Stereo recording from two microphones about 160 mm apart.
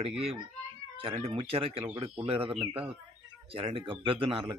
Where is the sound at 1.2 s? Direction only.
35° right (ahead or behind).